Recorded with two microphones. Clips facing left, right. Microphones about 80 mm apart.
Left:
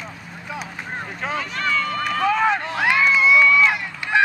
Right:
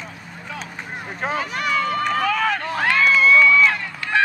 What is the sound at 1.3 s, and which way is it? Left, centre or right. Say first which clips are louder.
Boat: right 1 dB; centre.